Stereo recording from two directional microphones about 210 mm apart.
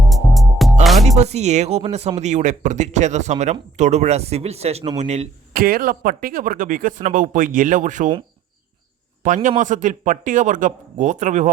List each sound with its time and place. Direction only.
0.1 s music: centre (ahead or behind)
1.0 s speech: 30° right (ahead or behind)
9.2 s speech: 40° right (ahead or behind)